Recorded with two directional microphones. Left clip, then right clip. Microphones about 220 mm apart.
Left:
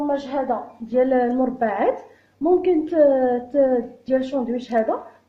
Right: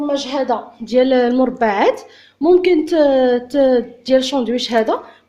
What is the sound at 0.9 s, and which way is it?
A woman's voice, 50° right (ahead or behind).